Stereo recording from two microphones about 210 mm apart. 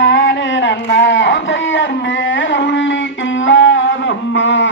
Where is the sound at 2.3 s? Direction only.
60° left (ahead or behind).